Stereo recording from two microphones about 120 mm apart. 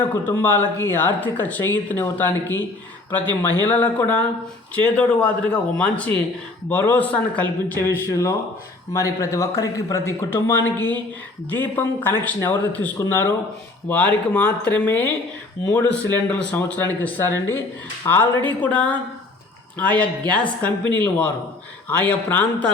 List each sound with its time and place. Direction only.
0.0 s speech: 15° left (ahead or behind)
10.8 s speech: 35° right (ahead or behind)
11.5 s speech: 15° left (ahead or behind)